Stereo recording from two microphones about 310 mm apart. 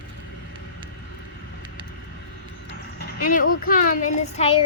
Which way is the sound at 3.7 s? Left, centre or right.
Left.